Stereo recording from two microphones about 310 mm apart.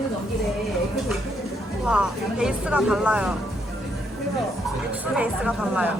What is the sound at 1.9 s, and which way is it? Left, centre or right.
Speech, centre.